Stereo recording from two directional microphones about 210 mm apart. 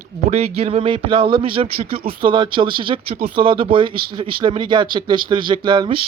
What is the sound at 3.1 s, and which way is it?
Speech, 45° right (ahead or behind).